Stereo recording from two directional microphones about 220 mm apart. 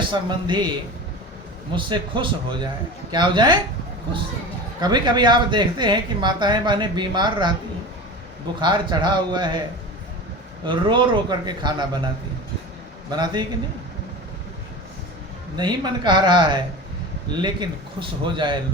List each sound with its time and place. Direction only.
0.0 s a woman's voice: 20° right (ahead or behind)
1.7 s a woman's voice: 20° right (ahead or behind)
4.8 s a woman's voice: 20° right (ahead or behind)
8.6 s a woman's voice: 20° right (ahead or behind)
10.7 s a woman's voice: 20° right (ahead or behind)
15.5 s a woman's voice: 20° right (ahead or behind)